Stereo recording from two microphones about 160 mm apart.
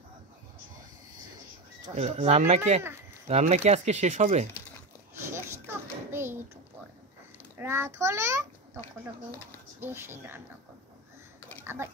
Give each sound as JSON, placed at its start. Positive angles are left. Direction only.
{"t": 2.0, "sound": "speech", "side_deg": -40}
{"t": 5.1, "sound": "a sound", "side_deg": -15}
{"t": 7.5, "sound": "a child's voice", "side_deg": -15}
{"t": 9.8, "sound": "a child's voice", "side_deg": -15}
{"t": 11.6, "sound": "speech", "side_deg": -15}